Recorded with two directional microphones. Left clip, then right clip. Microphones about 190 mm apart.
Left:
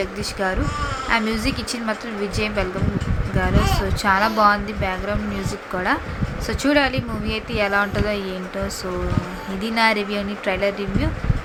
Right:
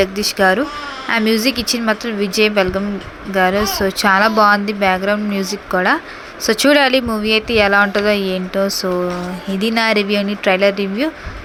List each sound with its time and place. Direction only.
0.0 s speech: 30° right (ahead or behind)
9.6 s speech: 35° right (ahead or behind)